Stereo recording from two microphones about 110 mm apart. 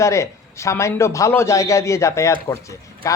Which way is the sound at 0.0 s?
25° left (ahead or behind).